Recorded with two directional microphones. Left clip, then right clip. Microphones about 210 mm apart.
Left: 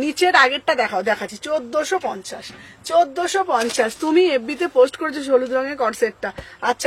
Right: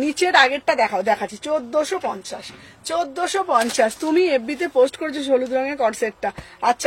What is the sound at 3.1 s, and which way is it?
Speech, 20° left (ahead or behind).